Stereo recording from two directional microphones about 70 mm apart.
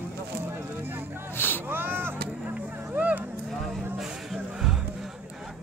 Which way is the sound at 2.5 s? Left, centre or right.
Right.